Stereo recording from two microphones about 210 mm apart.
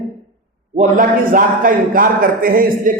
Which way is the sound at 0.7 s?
35° right (ahead or behind).